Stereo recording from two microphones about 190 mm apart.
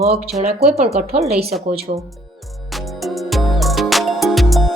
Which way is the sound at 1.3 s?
35° right (ahead or behind).